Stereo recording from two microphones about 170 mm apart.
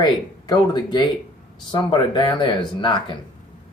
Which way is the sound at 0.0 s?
25° left (ahead or behind).